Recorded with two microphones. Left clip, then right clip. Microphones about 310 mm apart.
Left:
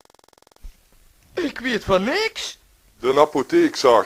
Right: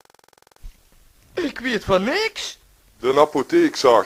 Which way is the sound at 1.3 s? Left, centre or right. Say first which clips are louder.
Even; centre.